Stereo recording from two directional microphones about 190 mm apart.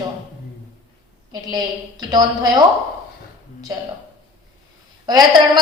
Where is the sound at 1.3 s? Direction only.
20° right (ahead or behind).